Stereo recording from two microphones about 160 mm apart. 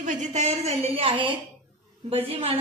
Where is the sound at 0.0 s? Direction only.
45° right (ahead or behind).